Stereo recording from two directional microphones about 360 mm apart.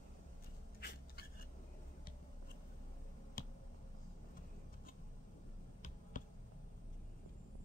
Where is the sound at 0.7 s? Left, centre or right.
Left.